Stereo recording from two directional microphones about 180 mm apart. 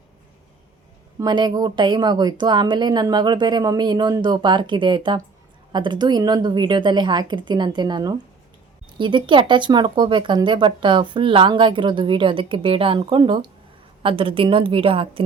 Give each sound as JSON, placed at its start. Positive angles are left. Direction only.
{"t": 1.2, "sound": "speech", "side_deg": -20}